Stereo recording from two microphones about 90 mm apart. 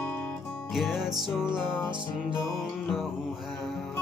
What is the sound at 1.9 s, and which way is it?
Music, 60° right (ahead or behind).